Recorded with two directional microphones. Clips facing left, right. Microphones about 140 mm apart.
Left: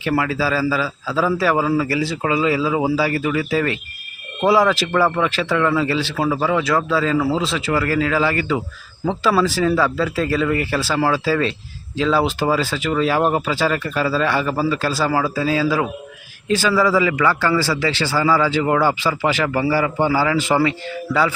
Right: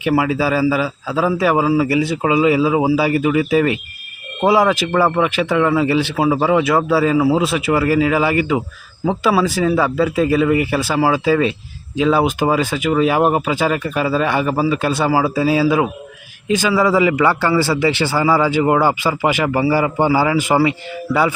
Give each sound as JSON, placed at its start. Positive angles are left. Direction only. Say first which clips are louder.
{"t": 0.0, "sound": "speech", "louder": "right 4 dB", "side_deg": -15}
{"t": 1.9, "sound": "speech", "louder": "right 4 dB", "side_deg": -20}
{"t": 7.1, "sound": "speech", "louder": "right 4 dB", "side_deg": -10}
{"t": 7.7, "sound": "speech", "louder": "right 4 dB", "side_deg": -25}